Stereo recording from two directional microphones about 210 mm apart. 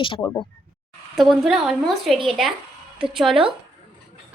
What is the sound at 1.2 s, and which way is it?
A woman's voice, centre (ahead or behind).